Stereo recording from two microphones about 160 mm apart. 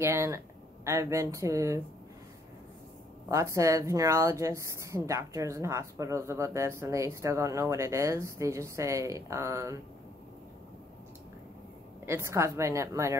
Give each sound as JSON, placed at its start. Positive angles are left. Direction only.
{"t": 0.0, "sound": "a woman's voice", "side_deg": -20}
{"t": 3.3, "sound": "speech", "side_deg": -20}
{"t": 12.1, "sound": "a woman's voice", "side_deg": -15}